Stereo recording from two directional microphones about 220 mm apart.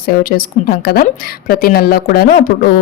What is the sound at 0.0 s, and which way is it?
A woman's voice, 40° left (ahead or behind).